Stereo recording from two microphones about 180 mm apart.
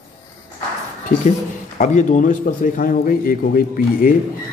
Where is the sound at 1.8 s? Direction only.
45° left (ahead or behind).